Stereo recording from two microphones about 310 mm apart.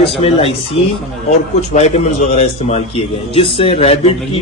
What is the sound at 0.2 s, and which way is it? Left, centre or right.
A man's voice, centre.